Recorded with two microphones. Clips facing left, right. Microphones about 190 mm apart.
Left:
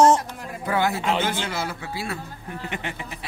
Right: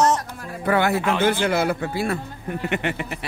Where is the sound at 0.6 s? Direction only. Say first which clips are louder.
Right 4 dB; 65° right (ahead or behind).